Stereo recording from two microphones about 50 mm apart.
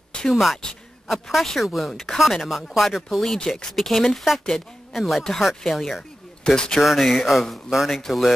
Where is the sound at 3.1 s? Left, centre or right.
Centre.